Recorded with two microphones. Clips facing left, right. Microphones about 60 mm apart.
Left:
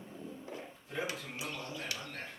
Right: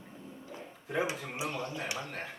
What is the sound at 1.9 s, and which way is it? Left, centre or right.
Speech, right.